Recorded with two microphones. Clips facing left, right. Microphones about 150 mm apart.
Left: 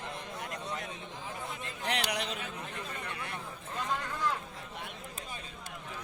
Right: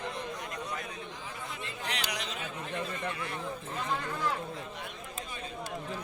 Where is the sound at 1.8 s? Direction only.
55° left (ahead or behind).